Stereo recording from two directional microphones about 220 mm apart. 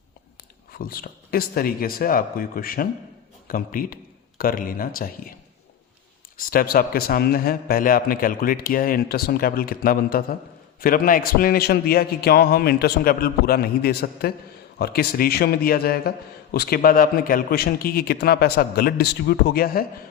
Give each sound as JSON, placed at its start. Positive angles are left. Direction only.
{"t": 0.7, "sound": "speech", "side_deg": 40}
{"t": 6.3, "sound": "a man's voice", "side_deg": 40}